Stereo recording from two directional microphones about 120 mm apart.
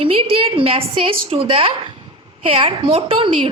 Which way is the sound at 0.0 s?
50° right (ahead or behind).